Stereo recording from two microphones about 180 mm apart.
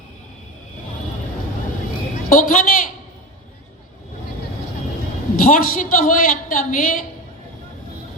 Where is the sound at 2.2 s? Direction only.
45° left (ahead or behind).